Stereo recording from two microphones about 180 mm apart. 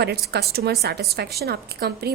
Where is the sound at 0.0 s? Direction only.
65° right (ahead or behind).